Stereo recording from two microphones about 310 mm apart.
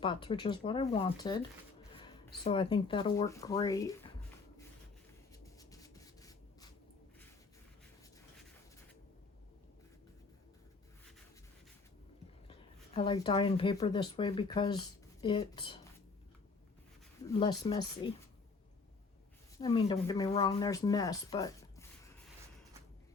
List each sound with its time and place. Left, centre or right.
0.0 s speech: centre
2.0 s a sound: centre
2.5 s speech: centre
5.3 s a sound: centre
12.5 s speech: centre
17.2 s speech: centre
19.5 s speech: centre